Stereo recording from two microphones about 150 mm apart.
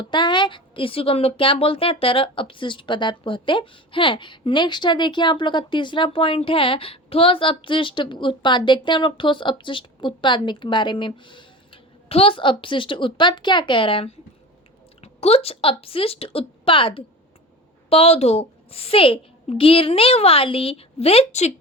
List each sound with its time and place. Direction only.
0.0 s speech: 30° left (ahead or behind)